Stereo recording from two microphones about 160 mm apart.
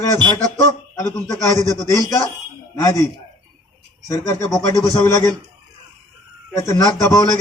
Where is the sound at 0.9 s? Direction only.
20° left (ahead or behind).